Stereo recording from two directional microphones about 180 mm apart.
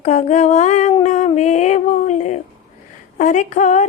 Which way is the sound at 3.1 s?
45° left (ahead or behind).